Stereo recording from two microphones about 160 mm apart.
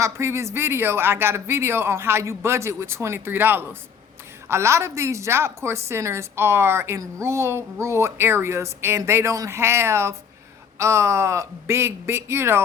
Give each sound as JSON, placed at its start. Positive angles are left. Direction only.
{"t": 0.0, "sound": "a woman's voice", "side_deg": -15}